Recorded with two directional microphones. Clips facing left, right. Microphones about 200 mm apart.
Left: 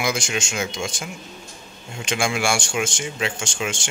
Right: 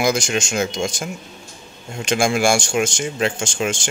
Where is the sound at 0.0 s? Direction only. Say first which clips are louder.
Right 5 dB; 40° right (ahead or behind).